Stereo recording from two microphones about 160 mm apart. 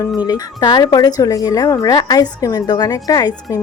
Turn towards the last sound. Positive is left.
turn(degrees=25)  # may be behind; listen again after turning